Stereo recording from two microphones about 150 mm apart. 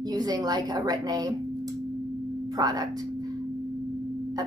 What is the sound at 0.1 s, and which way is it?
Speech, 25° right (ahead or behind).